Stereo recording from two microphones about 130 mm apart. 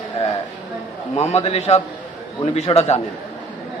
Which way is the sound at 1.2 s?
55° left (ahead or behind).